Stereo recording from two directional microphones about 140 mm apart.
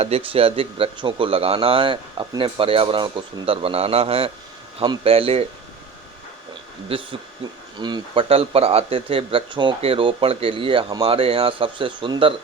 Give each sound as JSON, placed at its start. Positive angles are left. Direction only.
{"t": 0.0, "sound": "speech", "side_deg": -45}
{"t": 6.8, "sound": "speech", "side_deg": -40}